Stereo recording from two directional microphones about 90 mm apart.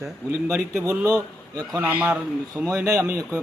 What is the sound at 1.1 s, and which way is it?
Speech, 40° right (ahead or behind).